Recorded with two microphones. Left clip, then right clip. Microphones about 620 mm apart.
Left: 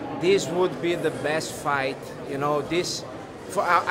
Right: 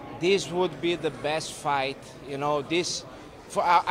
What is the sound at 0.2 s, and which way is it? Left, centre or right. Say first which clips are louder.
Speech: left 3 dB; right.